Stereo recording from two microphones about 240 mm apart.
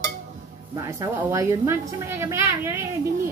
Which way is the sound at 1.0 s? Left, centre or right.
Centre.